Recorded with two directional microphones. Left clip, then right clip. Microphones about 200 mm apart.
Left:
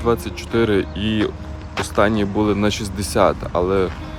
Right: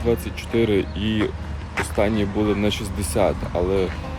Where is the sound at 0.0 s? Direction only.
20° left (ahead or behind).